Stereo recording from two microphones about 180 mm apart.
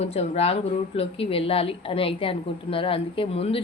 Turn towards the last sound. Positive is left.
turn(degrees=30)  # may be behind; listen again after turning